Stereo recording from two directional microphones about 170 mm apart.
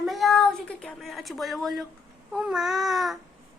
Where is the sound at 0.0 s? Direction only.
Centre (ahead or behind).